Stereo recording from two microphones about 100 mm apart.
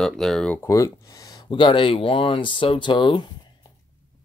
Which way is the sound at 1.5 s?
55° left (ahead or behind).